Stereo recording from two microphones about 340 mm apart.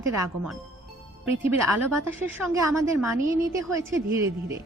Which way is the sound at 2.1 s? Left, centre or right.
Centre.